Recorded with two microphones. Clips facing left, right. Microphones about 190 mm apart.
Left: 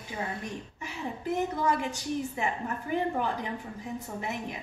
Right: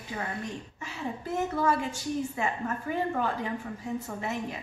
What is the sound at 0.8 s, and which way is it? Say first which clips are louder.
A woman's voice: even; 15° left (ahead or behind).